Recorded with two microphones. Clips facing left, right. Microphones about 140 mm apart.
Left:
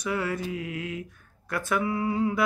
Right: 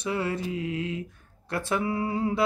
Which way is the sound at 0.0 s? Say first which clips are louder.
Even; 25° right (ahead or behind).